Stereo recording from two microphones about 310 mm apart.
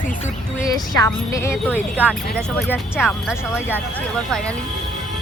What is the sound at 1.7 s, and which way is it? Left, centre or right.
Speech, centre.